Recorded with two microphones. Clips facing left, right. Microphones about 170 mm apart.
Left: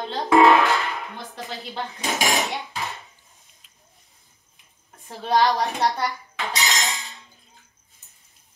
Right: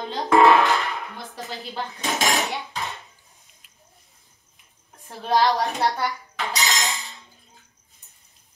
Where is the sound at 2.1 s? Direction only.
15° left (ahead or behind).